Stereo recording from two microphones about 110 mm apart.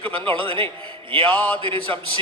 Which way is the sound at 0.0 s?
55° right (ahead or behind).